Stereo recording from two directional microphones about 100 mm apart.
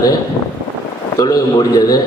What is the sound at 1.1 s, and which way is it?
Speech, 40° left (ahead or behind).